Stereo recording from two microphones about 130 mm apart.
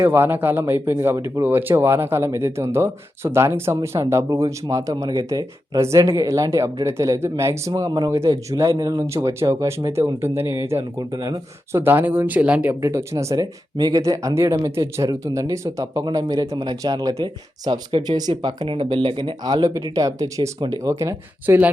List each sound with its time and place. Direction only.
0.0 s speech: 20° right (ahead or behind)
11.8 s speech: 15° right (ahead or behind)
12.8 s speech: 20° right (ahead or behind)